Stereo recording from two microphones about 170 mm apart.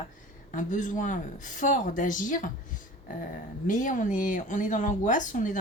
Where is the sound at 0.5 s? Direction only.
50° left (ahead or behind).